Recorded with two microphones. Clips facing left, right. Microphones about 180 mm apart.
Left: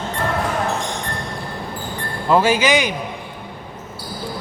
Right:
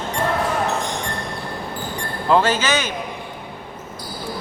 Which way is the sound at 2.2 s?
5° left (ahead or behind).